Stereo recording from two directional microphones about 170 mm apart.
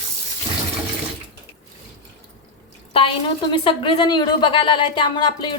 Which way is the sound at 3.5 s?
30° left (ahead or behind).